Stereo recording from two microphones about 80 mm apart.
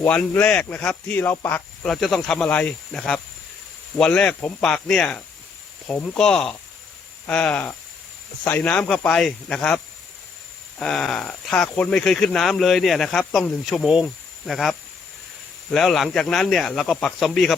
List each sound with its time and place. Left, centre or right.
0.1 s speech: centre
1.1 s speech: left
1.8 s speech: centre
10.8 s speech: centre
13.7 s speech: centre